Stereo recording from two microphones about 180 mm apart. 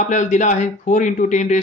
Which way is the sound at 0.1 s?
40° left (ahead or behind).